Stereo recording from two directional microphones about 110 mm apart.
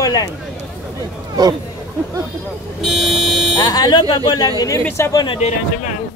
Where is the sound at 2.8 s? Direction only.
Centre (ahead or behind).